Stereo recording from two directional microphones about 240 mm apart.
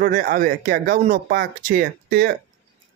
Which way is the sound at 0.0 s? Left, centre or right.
Right.